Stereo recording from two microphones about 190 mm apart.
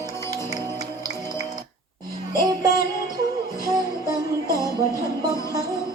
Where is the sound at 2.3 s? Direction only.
20° right (ahead or behind).